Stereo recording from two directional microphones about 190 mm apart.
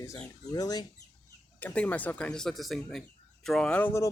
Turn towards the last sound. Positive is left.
turn(degrees=10)  # may be behind; listen again after turning